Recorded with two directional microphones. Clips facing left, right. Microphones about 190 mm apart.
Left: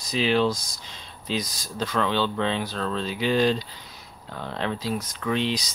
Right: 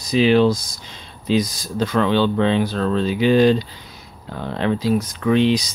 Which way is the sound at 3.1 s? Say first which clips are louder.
Right 7 dB; 60° right (ahead or behind).